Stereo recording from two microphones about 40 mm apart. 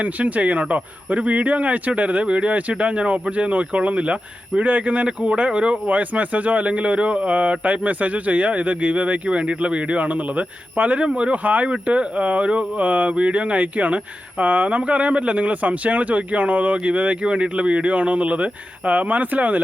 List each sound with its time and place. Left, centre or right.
0.0 s speech: right